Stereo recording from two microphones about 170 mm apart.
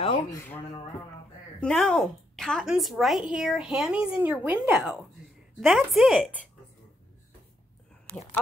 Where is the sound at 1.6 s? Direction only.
5° left (ahead or behind).